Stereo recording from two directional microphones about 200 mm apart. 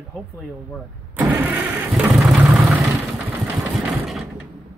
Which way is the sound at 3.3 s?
Centre (ahead or behind).